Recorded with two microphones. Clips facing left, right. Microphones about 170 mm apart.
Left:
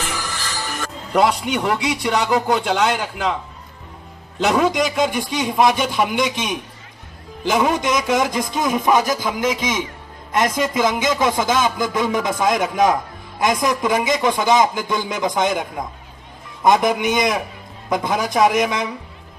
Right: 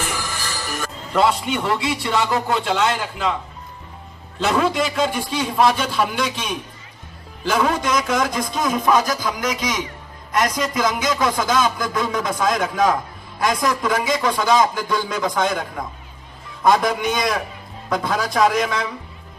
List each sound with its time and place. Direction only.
1.1 s a man's voice: 15° left (ahead or behind)
4.4 s a man's voice: 15° left (ahead or behind)
7.4 s a sound: 20° left (ahead or behind)